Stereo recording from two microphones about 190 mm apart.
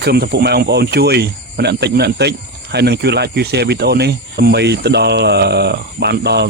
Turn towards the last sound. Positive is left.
turn(degrees=-60)  # may be behind; listen again after turning